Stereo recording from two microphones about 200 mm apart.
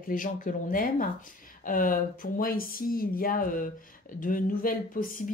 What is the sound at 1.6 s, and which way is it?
Speech, 45° left (ahead or behind).